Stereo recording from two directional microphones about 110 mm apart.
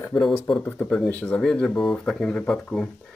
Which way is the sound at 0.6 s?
10° left (ahead or behind).